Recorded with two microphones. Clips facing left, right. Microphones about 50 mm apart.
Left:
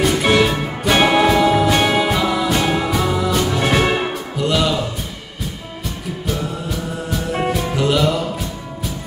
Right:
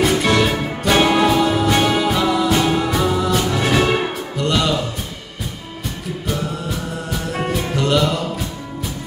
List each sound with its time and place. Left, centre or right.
0.2 s music: centre
0.9 s music: centre
1.3 s music: centre
7.1 s music: centre